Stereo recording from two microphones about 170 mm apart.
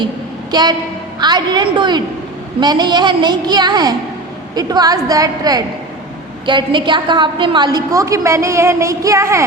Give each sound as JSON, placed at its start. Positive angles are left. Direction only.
{"t": 0.5, "sound": "a woman's voice", "side_deg": -25}